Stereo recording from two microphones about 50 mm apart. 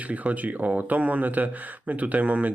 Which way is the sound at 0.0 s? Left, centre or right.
Right.